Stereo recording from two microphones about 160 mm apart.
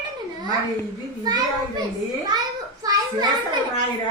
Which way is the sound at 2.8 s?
25° right (ahead or behind).